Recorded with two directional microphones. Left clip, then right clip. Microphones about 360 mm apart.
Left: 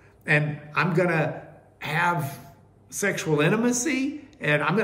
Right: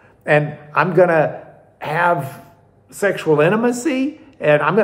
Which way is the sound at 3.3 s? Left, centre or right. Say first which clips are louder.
Right 9 dB; right.